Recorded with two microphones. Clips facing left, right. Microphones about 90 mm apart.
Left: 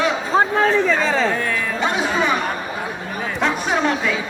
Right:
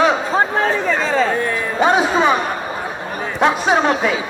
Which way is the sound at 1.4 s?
25° right (ahead or behind).